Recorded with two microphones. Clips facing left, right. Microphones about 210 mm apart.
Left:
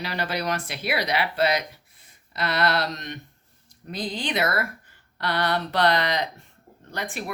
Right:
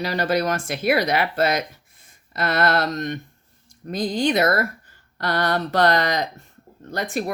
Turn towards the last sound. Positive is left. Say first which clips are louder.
# right 7 dB
turn(degrees=-40)  # may be behind; listen again after turning